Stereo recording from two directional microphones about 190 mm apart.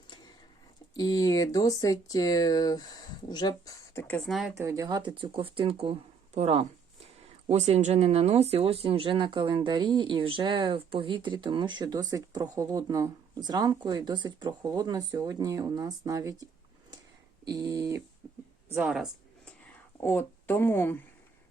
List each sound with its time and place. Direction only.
0.9 s speech: 20° left (ahead or behind); by 4.5 s centre (ahead or behind)
4.5 s speech: 15° right (ahead or behind)
18.2 s a sound: 10° right (ahead or behind)
18.7 s speech: 5° right (ahead or behind)
20.0 s speech: 10° left (ahead or behind)